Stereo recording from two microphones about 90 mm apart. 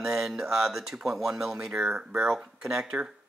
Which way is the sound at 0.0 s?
5° right (ahead or behind).